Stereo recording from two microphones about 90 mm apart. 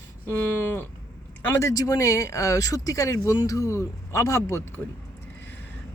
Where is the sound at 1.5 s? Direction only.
35° left (ahead or behind).